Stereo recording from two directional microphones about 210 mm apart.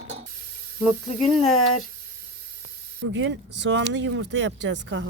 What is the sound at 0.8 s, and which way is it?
Speech, centre (ahead or behind).